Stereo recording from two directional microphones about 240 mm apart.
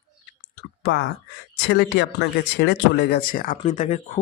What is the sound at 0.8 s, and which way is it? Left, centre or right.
Speech, left.